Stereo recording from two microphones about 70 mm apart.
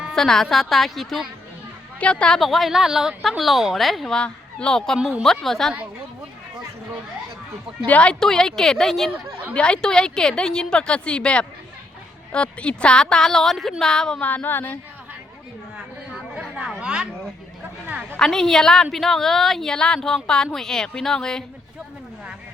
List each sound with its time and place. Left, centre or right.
0.1 s a woman's voice: centre
2.0 s speech: centre
2.4 s a woman's voice: centre
4.1 s a woman's voice: centre
7.9 s speech: centre
8.2 s speech: centre
14.2 s speech: left
16.8 s a sound: centre
18.2 s speech: centre